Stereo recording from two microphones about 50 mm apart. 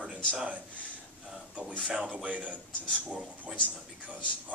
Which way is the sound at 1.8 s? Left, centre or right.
Right.